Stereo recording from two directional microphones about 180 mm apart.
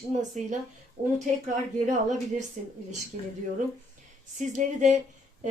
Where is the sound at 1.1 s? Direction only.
40° right (ahead or behind).